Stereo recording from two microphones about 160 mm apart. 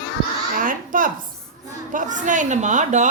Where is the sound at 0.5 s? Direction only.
55° right (ahead or behind).